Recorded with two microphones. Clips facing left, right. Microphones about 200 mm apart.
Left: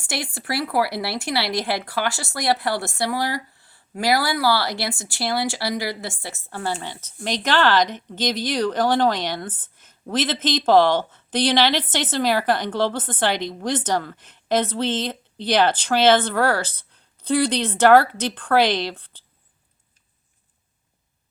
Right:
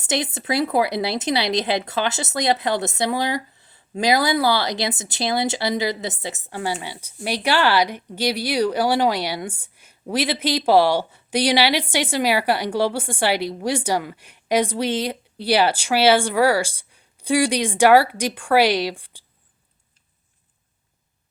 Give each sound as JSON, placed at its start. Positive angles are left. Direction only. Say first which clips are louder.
{"t": 0.0, "sound": "a woman's voice", "louder": "right 5 dB", "side_deg": -20}